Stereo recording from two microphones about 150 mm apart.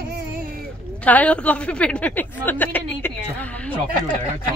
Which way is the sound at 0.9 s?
10° left (ahead or behind).